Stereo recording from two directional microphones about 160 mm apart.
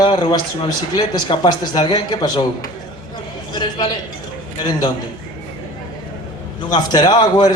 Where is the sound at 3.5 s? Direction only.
25° left (ahead or behind).